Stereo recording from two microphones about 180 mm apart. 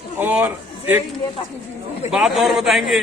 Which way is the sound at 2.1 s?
Centre (ahead or behind).